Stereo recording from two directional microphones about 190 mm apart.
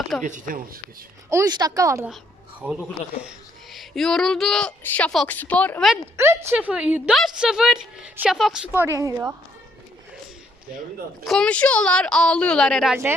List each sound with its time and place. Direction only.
0.2 s speech: 40° right (ahead or behind)
1.3 s a woman's voice: 20° right (ahead or behind); by 5.9 s 5° left (ahead or behind)
6.1 s a woman's voice: 15° right (ahead or behind)
11.3 s speech: 5° left (ahead or behind)